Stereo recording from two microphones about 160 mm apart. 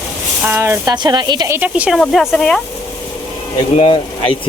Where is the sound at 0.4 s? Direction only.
15° right (ahead or behind).